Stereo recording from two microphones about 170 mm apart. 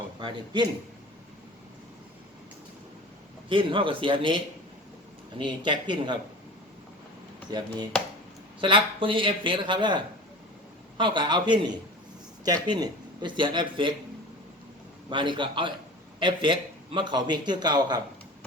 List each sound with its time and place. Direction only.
0.2 s a man's voice: 25° right (ahead or behind)
3.5 s a man's voice: 30° right (ahead or behind)
5.4 s a man's voice: 30° right (ahead or behind)
7.5 s a man's voice: 25° right (ahead or behind)
15.1 s a man's voice: 30° right (ahead or behind)